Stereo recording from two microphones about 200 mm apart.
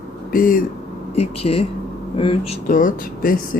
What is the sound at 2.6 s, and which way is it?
Speech, 40° left (ahead or behind).